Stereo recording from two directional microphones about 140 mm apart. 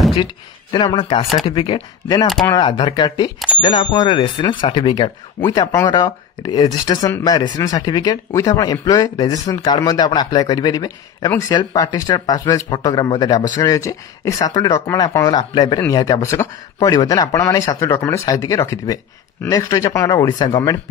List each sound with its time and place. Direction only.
0.1 s speech: 35° left (ahead or behind)
3.3 s speech: 5° right (ahead or behind)
3.6 s a man's voice: 30° left (ahead or behind)